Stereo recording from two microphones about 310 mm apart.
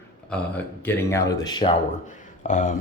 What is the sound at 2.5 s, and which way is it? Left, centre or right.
Speech, left.